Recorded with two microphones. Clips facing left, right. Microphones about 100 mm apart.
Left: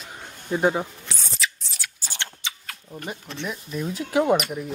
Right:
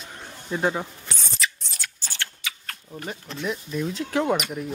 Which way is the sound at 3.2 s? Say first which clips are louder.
Right 2 dB; centre (ahead or behind).